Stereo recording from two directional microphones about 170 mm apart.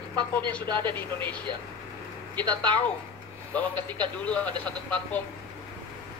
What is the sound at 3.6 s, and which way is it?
Speech, 10° left (ahead or behind).